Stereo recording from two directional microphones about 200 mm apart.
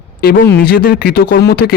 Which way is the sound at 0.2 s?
50° left (ahead or behind).